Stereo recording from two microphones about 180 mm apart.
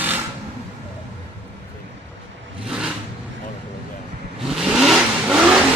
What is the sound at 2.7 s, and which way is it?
Vehicle, 5° right (ahead or behind).